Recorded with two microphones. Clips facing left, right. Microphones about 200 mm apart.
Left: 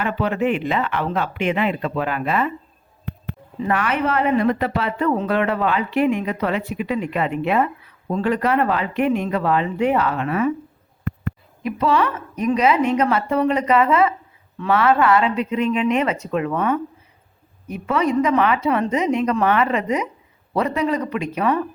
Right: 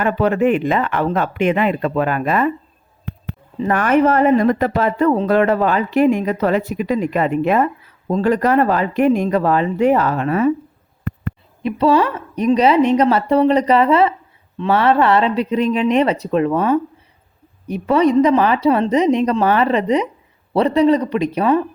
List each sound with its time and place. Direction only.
0.0 s speech: 45° right (ahead or behind)
11.6 s speech: 30° right (ahead or behind)